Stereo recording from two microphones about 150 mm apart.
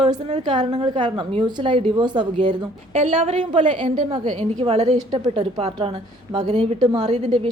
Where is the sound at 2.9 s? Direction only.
50° right (ahead or behind).